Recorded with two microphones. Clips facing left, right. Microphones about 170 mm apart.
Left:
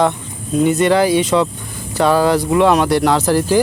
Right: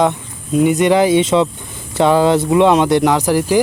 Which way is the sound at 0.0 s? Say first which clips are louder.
Right 1 dB; 15° right (ahead or behind).